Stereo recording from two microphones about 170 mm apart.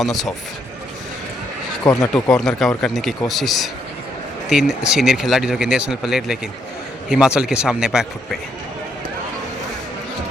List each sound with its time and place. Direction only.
0.0 s speech: centre (ahead or behind)
1.8 s speech: 20° left (ahead or behind)
2.1 s speech: 5° left (ahead or behind)